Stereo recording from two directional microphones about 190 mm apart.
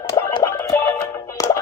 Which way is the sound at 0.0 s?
15° left (ahead or behind).